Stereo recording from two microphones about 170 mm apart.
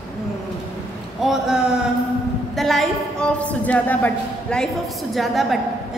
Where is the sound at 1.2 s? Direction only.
5° right (ahead or behind).